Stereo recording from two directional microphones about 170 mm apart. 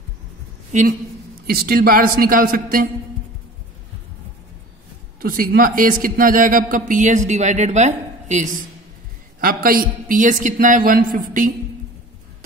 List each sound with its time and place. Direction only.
0.7 s a woman's voice: 45° right (ahead or behind)
1.5 s a woman's voice: 60° right (ahead or behind)
5.2 s a woman's voice: 60° right (ahead or behind)
9.4 s a woman's voice: 60° right (ahead or behind)